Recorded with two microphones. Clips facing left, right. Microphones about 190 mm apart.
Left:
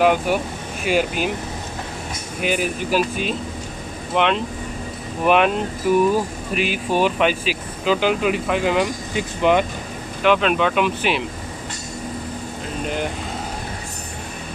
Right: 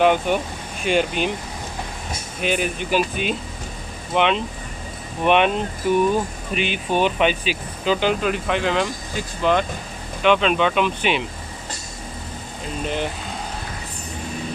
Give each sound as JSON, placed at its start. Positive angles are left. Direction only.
{"t": 0.0, "sound": "speech", "side_deg": 5}
{"t": 2.4, "sound": "speech", "side_deg": 5}
{"t": 10.2, "sound": "speech", "side_deg": 5}